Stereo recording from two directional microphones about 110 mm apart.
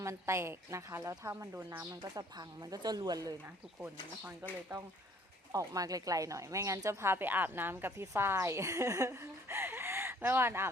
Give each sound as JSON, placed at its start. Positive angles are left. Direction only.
{"t": 0.0, "sound": "speech", "side_deg": -25}
{"t": 2.0, "sound": "speech", "side_deg": -35}
{"t": 3.4, "sound": "speech", "side_deg": -20}
{"t": 5.5, "sound": "speech", "side_deg": -30}